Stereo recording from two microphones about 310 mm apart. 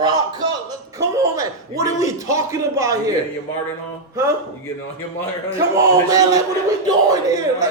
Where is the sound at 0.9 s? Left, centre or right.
Centre.